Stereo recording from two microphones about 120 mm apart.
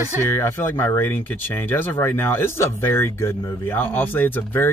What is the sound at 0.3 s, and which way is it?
Speech, 20° left (ahead or behind).